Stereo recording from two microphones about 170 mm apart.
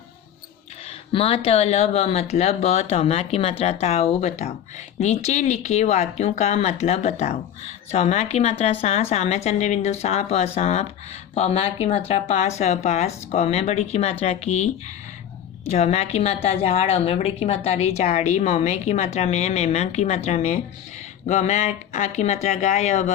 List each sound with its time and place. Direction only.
0.9 s a woman's voice: 35° left (ahead or behind)
15.7 s a woman's voice: 40° left (ahead or behind)